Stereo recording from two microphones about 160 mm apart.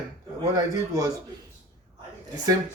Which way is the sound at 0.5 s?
20° right (ahead or behind).